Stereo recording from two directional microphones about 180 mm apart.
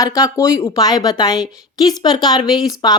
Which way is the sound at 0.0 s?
20° left (ahead or behind).